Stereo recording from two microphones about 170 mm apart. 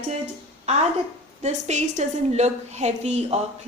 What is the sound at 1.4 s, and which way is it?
A woman's voice, 40° right (ahead or behind).